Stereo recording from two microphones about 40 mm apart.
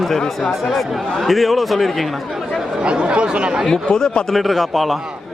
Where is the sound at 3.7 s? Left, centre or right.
Centre.